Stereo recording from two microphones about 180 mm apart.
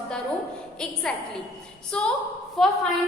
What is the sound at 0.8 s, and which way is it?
A woman's voice, 5° left (ahead or behind).